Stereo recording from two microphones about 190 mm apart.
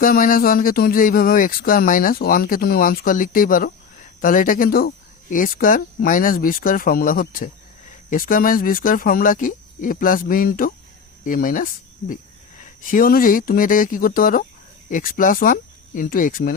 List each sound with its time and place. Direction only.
0.0 s speech: 50° left (ahead or behind)